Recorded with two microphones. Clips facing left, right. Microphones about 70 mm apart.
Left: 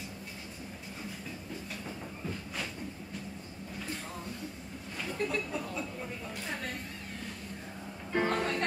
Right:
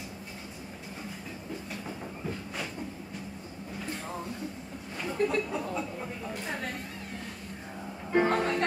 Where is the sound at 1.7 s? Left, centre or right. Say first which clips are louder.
Right 3 dB; centre.